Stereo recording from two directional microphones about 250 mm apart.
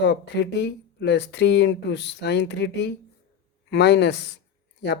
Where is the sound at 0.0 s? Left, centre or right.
Left.